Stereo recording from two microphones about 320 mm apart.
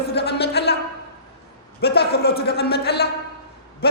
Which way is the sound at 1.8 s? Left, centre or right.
Left.